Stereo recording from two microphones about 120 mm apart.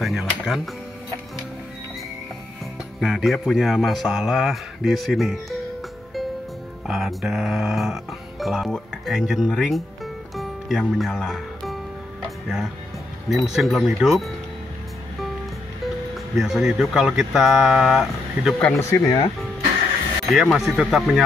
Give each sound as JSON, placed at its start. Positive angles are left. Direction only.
{"t": 0.0, "sound": "speech", "side_deg": 0}
{"t": 3.0, "sound": "speech", "side_deg": -5}
{"t": 6.9, "sound": "speech", "side_deg": 0}
{"t": 10.3, "sound": "music", "side_deg": 0}
{"t": 12.4, "sound": "speech", "side_deg": -5}
{"t": 16.3, "sound": "speech", "side_deg": -5}
{"t": 18.8, "sound": "speech", "side_deg": 25}
{"t": 20.2, "sound": "speech", "side_deg": 0}